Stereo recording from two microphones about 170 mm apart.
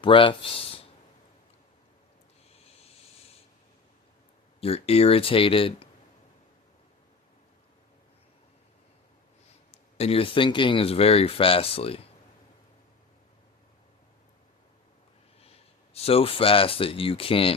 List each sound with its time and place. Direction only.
0.0 s speech: 30° left (ahead or behind)
2.6 s a sound: 35° left (ahead or behind)
4.6 s speech: 35° left (ahead or behind)
10.0 s speech: 35° left (ahead or behind)
15.4 s speech: 35° left (ahead or behind)